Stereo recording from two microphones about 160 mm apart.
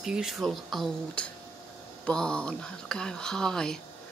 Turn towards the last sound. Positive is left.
turn(degrees=5)  # may be behind; listen again after turning